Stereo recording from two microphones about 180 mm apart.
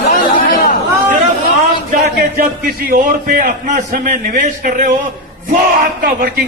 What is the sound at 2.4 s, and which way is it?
A man's voice, 50° right (ahead or behind).